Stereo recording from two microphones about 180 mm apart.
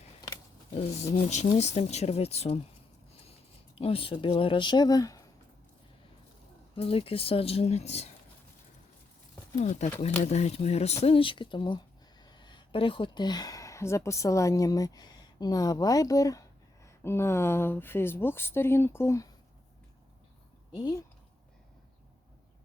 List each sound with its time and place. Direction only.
0.7 s a woman's voice: 35° left (ahead or behind)
3.8 s speech: 30° left (ahead or behind)
6.7 s a woman's voice: 30° left (ahead or behind)
9.6 s a woman's voice: 40° left (ahead or behind); by 19.3 s 15° left (ahead or behind)
20.7 s speech: 25° left (ahead or behind)